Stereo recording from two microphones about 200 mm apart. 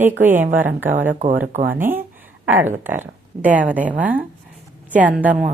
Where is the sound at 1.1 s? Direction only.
40° right (ahead or behind).